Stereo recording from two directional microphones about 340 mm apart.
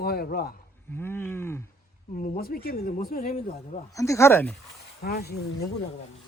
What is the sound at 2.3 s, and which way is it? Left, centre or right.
Speech, left.